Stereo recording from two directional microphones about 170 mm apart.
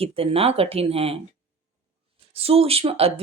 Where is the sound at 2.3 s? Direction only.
35° right (ahead or behind).